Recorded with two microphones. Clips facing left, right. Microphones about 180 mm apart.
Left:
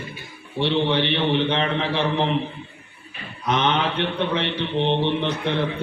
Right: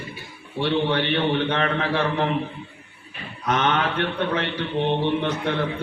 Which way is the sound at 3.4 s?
20° left (ahead or behind).